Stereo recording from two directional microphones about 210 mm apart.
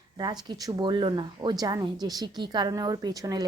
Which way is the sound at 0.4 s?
20° right (ahead or behind).